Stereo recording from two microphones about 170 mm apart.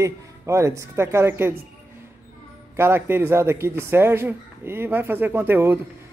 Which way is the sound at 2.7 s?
15° right (ahead or behind).